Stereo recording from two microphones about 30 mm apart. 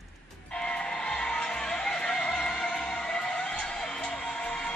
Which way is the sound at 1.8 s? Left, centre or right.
Centre.